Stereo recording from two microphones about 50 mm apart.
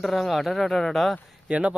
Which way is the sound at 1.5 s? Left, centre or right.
Right.